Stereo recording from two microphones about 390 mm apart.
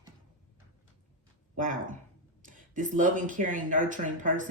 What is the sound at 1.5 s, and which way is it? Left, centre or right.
Speech, centre.